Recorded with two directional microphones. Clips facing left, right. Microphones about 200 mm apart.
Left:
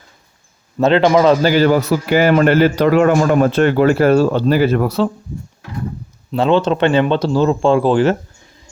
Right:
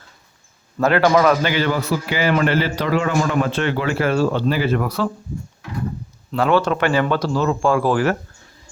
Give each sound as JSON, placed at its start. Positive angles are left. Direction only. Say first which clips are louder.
{"t": 0.8, "sound": "speech", "louder": "left 4 dB", "side_deg": 20}
{"t": 1.4, "sound": "a man's voice", "louder": "left 7 dB", "side_deg": 40}
{"t": 6.3, "sound": "speech", "louder": "left 3 dB", "side_deg": 25}